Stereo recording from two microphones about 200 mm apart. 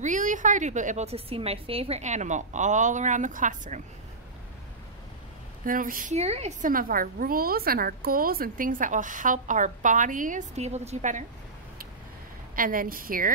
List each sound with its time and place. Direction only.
0.0 s a woman's voice: 40° right (ahead or behind)
5.7 s a woman's voice: 45° right (ahead or behind)
12.5 s a woman's voice: 45° right (ahead or behind)